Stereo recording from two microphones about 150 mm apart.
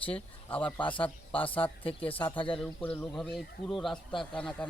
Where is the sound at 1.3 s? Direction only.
35° left (ahead or behind).